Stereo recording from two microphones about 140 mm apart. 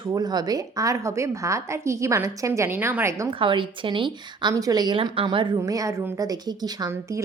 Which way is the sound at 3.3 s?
40° right (ahead or behind).